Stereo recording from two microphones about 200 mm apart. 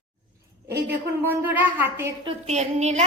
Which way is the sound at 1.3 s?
10° right (ahead or behind).